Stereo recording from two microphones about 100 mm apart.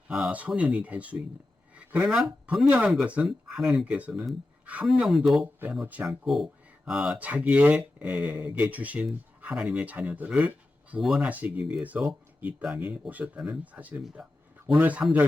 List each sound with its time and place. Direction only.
0.1 s speech: 10° right (ahead or behind)
1.7 s a sound: 15° right (ahead or behind)
2.5 s speech: 10° right (ahead or behind)
4.1 s speech: 5° right (ahead or behind)
4.6 s speech: 15° right (ahead or behind)
4.9 s speech: 5° right (ahead or behind)
5.8 s speech: 15° right (ahead or behind)
6.1 s speech: centre (ahead or behind)
11.0 s speech: 5° right (ahead or behind)
11.3 s speech: 15° right (ahead or behind)